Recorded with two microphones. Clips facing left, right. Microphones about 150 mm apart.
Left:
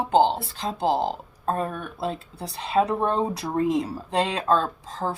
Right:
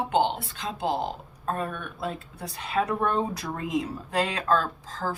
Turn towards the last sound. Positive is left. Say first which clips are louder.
# left 3 dB
turn(degrees=25)  # may be behind; listen again after turning